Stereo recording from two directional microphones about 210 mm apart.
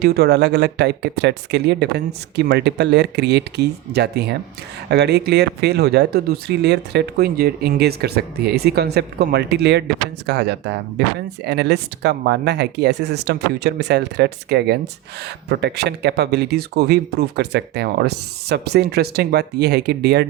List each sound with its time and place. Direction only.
0.0 s speech: 50° right (ahead or behind)